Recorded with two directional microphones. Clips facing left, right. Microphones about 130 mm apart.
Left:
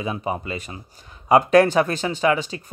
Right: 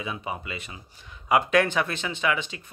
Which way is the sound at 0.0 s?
40° left (ahead or behind).